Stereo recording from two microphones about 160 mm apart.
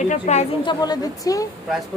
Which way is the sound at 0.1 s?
45° left (ahead or behind).